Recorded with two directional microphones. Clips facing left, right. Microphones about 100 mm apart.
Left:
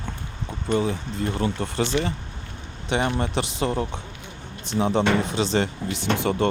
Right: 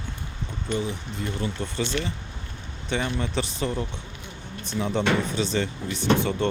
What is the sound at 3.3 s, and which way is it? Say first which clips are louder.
Speech: left 2 dB; 85° left.